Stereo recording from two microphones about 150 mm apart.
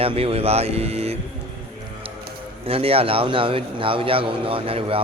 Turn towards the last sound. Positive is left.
turn(degrees=-40)  # may be behind; listen again after turning